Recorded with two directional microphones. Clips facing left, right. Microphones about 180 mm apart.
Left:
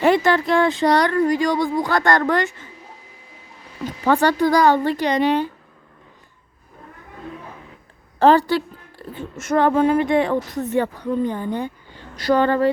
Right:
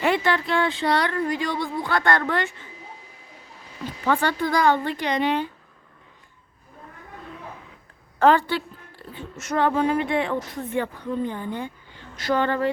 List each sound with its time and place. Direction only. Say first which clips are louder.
0.0 s speech: left 6 dB; 40° left (ahead or behind)
4.0 s speech: left 6 dB; 40° left (ahead or behind)
8.2 s speech: left 4 dB; 35° left (ahead or behind)
9.1 s speech: left 6 dB; 50° left (ahead or behind)